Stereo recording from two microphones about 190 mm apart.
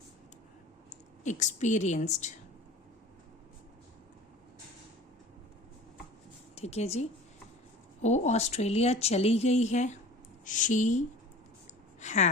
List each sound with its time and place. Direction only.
1.2 s speech: 40° left (ahead or behind)
6.6 s speech: 35° left (ahead or behind)